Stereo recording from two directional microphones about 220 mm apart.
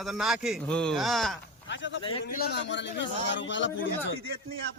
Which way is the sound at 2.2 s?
45° left (ahead or behind).